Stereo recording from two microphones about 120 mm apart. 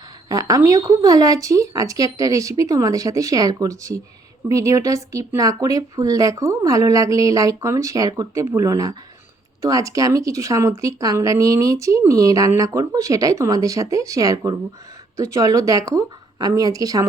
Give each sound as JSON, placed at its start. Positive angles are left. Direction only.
{"t": 0.3, "sound": "speech", "side_deg": -30}